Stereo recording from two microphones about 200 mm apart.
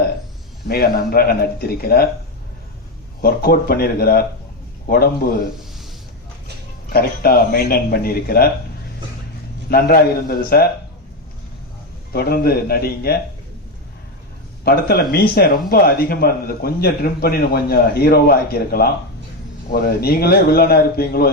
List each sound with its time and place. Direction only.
0.7 s speech: 50° left (ahead or behind)
3.2 s speech: 50° left (ahead or behind)
6.9 s speech: 50° left (ahead or behind)
9.6 s speech: 50° left (ahead or behind)
12.1 s speech: 50° left (ahead or behind)
14.6 s speech: 50° left (ahead or behind)